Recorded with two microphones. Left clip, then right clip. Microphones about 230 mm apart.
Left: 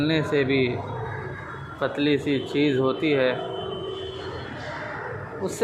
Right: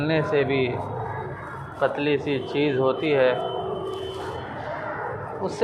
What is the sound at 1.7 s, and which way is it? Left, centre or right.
Speech, left.